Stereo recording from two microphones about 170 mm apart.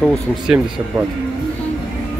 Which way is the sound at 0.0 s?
5° left (ahead or behind).